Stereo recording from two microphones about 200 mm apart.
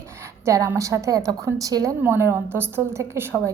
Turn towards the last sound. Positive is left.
turn(degrees=-10)  # may be behind; listen again after turning